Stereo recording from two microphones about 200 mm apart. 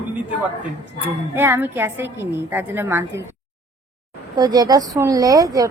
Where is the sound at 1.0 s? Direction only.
10° right (ahead or behind).